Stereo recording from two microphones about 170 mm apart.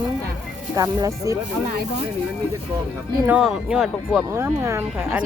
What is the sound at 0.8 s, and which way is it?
Speech, 20° right (ahead or behind).